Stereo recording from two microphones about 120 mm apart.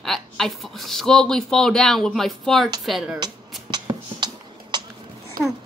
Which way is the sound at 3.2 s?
35° right (ahead or behind).